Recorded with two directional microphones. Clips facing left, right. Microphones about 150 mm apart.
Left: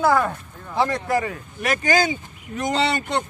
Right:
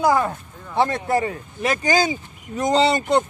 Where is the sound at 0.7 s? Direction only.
25° right (ahead or behind).